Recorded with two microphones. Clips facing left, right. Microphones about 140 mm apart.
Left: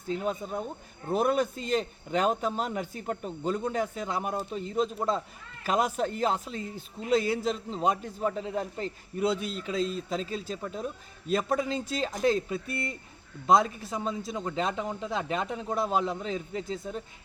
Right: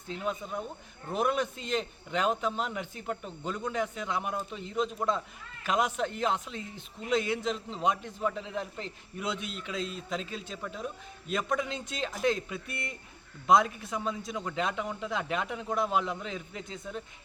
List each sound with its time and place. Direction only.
0.1 s speech: 40° left (ahead or behind)
13.9 s speech: 30° left (ahead or behind)